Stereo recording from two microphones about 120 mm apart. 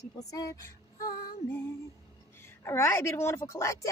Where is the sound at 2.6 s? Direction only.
20° left (ahead or behind).